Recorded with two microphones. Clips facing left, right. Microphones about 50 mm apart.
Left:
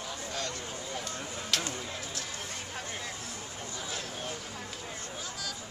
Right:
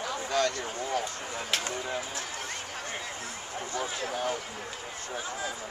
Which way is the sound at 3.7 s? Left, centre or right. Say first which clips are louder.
Right 7 dB; right.